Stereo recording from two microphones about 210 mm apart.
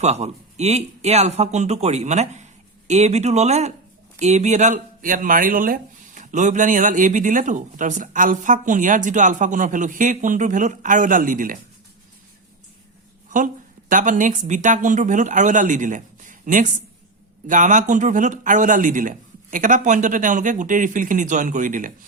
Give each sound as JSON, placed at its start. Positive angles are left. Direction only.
{"t": 0.0, "sound": "speech", "side_deg": -30}
{"t": 13.3, "sound": "speech", "side_deg": -40}